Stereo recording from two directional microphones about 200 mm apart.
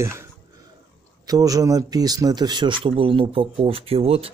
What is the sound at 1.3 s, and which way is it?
A man's voice, 15° right (ahead or behind).